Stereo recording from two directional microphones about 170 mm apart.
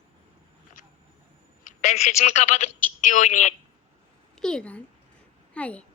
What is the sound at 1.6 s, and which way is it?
A woman's voice, 45° left (ahead or behind).